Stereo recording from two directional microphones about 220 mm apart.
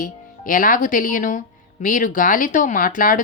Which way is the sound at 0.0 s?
40° left (ahead or behind).